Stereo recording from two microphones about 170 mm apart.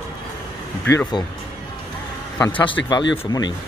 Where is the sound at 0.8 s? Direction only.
15° left (ahead or behind).